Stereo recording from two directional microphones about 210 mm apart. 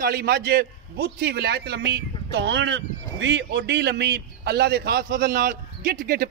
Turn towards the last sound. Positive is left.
turn(degrees=-45)  # may be behind; listen again after turning